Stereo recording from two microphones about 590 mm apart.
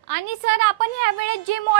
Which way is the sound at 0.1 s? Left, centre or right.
Right.